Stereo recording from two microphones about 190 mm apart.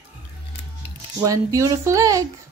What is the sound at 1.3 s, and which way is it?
Speech, 15° right (ahead or behind).